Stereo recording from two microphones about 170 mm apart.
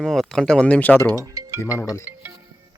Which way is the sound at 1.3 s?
20° right (ahead or behind).